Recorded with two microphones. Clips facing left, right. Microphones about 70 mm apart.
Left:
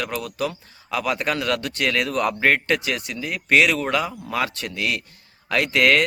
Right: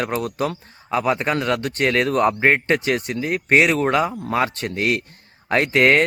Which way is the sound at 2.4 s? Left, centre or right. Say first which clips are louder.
Right 2 dB; right.